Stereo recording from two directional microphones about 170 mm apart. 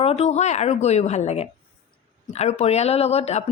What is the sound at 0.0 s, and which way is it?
A woman's voice, 35° left (ahead or behind).